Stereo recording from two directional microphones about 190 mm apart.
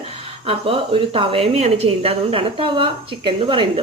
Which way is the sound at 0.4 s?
30° right (ahead or behind).